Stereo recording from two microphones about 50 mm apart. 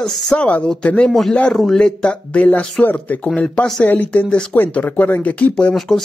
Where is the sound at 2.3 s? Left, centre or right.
Left.